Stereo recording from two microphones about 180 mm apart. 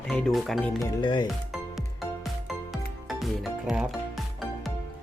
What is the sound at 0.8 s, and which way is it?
Speech, 25° left (ahead or behind).